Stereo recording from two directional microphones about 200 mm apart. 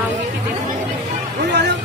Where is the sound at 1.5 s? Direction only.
60° right (ahead or behind).